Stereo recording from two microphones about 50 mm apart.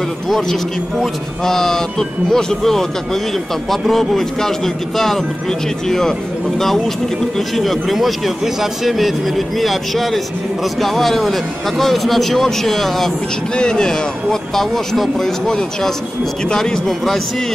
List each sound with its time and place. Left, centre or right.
0.3 s a man's voice: centre
7.3 s a man's voice: centre